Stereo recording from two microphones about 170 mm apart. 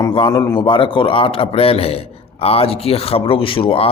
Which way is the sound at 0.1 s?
30° left (ahead or behind).